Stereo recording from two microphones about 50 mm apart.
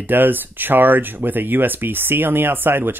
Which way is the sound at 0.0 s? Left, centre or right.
Right.